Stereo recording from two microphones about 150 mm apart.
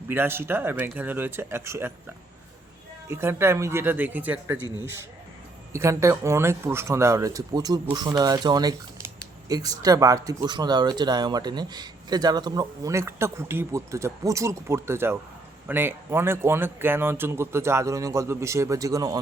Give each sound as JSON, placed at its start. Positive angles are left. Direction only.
{"t": 0.1, "sound": "a man's voice", "side_deg": -15}
{"t": 3.1, "sound": "a man's voice", "side_deg": -15}
{"t": 5.7, "sound": "a man's voice", "side_deg": -20}